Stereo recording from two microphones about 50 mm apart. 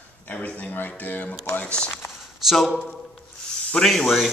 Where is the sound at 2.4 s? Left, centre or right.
Centre.